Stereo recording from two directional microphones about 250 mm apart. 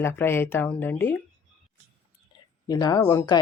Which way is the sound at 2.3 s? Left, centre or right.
Centre.